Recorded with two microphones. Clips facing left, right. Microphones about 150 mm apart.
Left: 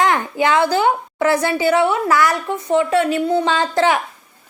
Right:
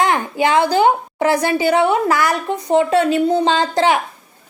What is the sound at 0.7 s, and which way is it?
A woman's voice, 25° right (ahead or behind).